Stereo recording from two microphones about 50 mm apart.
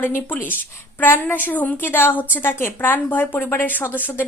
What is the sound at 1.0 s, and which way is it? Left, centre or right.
Speech, left.